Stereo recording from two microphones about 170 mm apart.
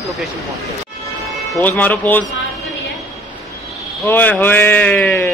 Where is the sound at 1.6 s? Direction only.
10° left (ahead or behind).